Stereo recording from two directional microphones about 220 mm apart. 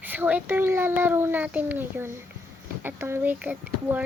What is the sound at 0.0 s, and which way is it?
A child's voice, 10° right (ahead or behind).